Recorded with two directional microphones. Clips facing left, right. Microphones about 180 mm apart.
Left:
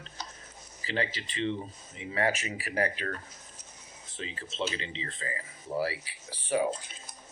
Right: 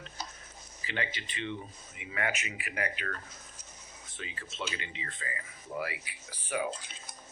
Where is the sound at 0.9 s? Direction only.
35° left (ahead or behind).